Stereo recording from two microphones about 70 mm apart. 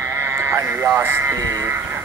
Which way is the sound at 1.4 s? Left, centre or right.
Right.